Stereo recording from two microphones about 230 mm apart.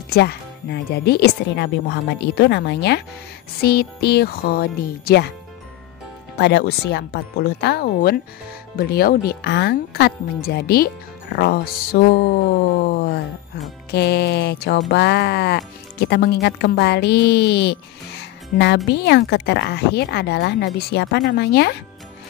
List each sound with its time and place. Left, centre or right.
0.1 s speech: left
6.3 s speech: left
12.8 s a sound: left
13.8 s speech: left